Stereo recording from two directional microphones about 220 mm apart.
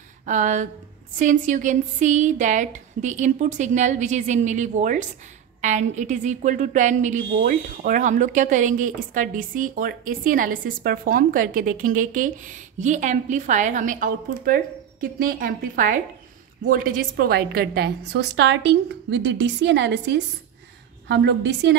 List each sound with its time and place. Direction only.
0.3 s a woman's voice: 35° right (ahead or behind); by 21.7 s 55° right (ahead or behind)